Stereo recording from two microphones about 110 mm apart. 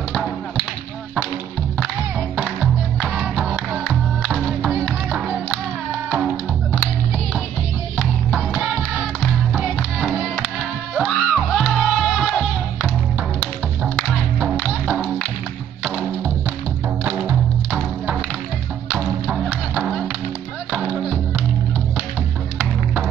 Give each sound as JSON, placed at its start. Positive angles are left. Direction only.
{"t": 2.4, "sound": "music", "side_deg": 0}
{"t": 8.4, "sound": "music", "side_deg": -5}
{"t": 11.6, "sound": "music", "side_deg": 5}
{"t": 14.6, "sound": "music", "side_deg": 5}
{"t": 17.0, "sound": "music", "side_deg": -5}
{"t": 18.9, "sound": "a sound", "side_deg": 0}